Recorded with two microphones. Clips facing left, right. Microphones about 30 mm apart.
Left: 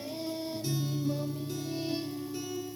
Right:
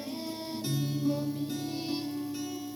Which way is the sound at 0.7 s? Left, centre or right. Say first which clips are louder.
Right 3 dB; right.